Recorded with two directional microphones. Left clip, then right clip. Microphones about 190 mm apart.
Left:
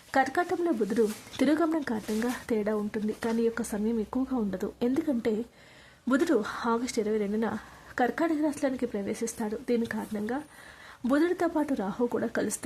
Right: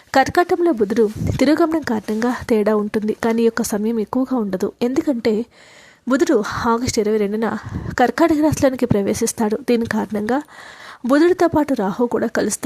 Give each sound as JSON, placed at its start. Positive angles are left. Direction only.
{"t": 0.1, "sound": "speech", "side_deg": -35}